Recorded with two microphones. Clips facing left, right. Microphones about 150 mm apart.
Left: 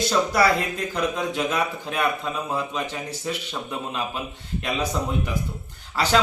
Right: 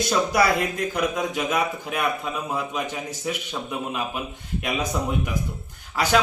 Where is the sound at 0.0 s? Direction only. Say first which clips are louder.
Even; 15° right (ahead or behind).